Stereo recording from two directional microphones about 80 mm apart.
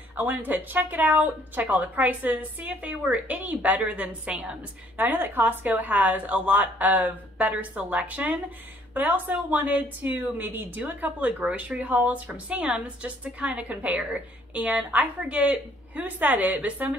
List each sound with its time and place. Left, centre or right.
0.1 s speech: right